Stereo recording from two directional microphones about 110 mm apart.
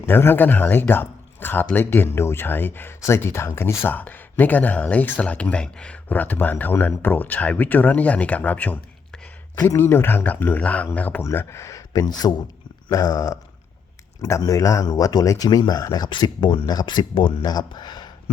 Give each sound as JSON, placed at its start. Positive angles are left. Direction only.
{"t": 0.0, "sound": "speech", "side_deg": 20}
{"t": 9.6, "sound": "speech", "side_deg": 20}